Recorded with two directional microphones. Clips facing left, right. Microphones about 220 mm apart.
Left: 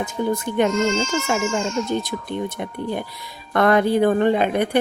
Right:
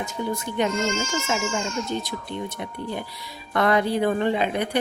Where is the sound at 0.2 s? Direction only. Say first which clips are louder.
Left 6 dB; 55° left (ahead or behind).